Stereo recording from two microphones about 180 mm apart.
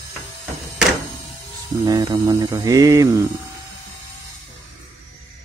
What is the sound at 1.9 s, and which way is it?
Mantra, 20° right (ahead or behind).